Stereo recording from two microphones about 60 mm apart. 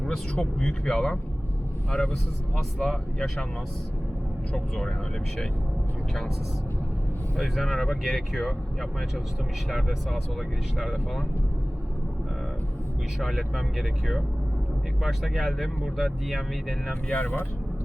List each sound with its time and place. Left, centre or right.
0.0 s speech: centre
2.8 s speech: centre
4.5 s speech: centre
7.3 s speech: centre
13.1 s speech: centre
16.9 s speech: left